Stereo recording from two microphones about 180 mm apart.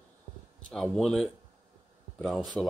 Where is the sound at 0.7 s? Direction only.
Centre (ahead or behind).